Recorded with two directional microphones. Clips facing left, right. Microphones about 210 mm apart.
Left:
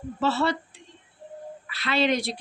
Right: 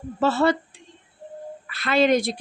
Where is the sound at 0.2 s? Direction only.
50° right (ahead or behind).